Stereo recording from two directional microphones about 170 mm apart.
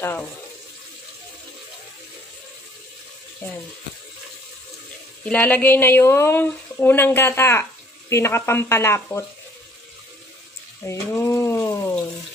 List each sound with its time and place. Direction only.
0.0 s speech: 10° left (ahead or behind)
5.2 s speech: 10° left (ahead or behind)
10.9 s a sound: 15° left (ahead or behind)